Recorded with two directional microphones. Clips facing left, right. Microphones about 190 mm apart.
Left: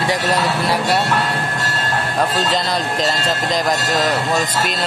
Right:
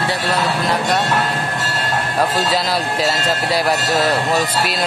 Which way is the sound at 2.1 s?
10° right (ahead or behind).